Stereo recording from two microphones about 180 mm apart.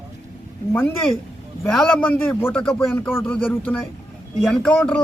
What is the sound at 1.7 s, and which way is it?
Speech, 5° left (ahead or behind).